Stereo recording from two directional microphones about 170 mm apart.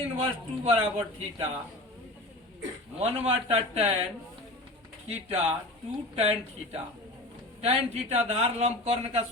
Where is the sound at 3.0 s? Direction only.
40° right (ahead or behind).